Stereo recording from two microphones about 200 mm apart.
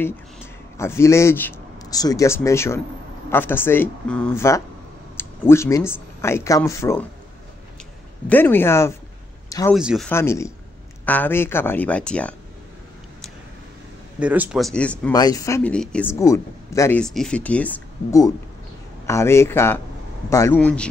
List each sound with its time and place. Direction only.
0.7 s speech: 15° left (ahead or behind)
8.3 s speech: 10° left (ahead or behind)
9.8 s speech: centre (ahead or behind)
10.1 s speech: 15° left (ahead or behind)
14.2 s speech: 5° right (ahead or behind)
15.1 s speech: 15° left (ahead or behind)
17.0 s speech: 5° left (ahead or behind)